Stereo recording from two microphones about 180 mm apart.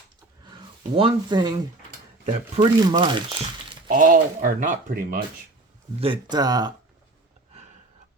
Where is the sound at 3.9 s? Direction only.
45° right (ahead or behind).